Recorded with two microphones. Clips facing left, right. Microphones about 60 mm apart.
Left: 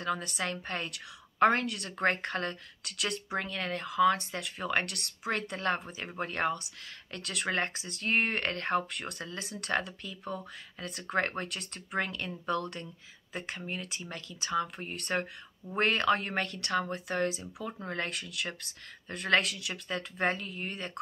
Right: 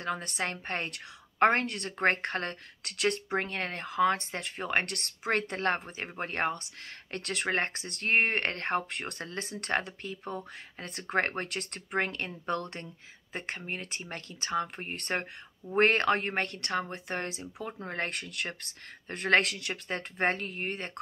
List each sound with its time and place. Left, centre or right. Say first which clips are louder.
0.0 s speech: even; right